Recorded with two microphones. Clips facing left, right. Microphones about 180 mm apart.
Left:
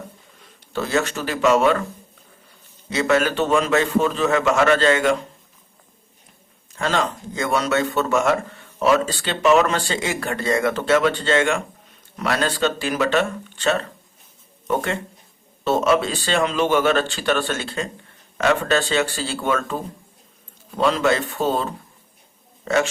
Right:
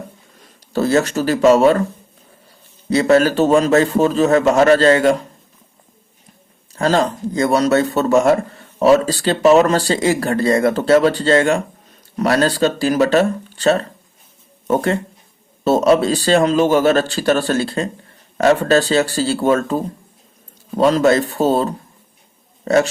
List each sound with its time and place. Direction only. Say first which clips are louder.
0.4 s speech: right 9 dB; 40° right (ahead or behind)
2.9 s a man's voice: right 6 dB; 35° right (ahead or behind)
6.7 s a man's voice: right 6 dB; 35° right (ahead or behind)